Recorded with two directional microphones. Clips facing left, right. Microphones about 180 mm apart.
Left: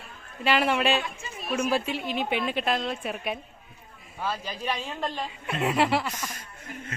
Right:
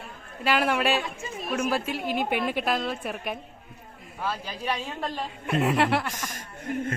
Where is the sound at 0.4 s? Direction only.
5° right (ahead or behind).